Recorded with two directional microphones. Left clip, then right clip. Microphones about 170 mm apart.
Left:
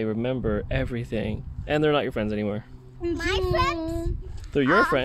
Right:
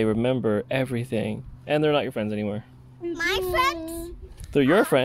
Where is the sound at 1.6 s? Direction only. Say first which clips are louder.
Even; centre (ahead or behind).